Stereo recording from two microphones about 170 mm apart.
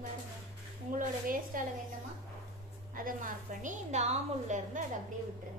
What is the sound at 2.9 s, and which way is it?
A woman's voice, 55° right (ahead or behind).